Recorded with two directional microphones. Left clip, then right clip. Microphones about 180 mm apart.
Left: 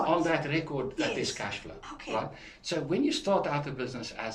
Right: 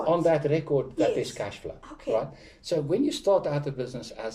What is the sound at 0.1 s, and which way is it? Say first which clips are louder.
Speech: right 5 dB; 35° right (ahead or behind).